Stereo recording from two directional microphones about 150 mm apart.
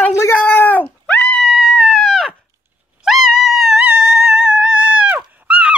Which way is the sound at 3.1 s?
Centre (ahead or behind).